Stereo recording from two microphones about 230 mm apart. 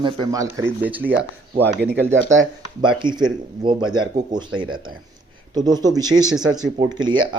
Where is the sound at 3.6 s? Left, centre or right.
Right.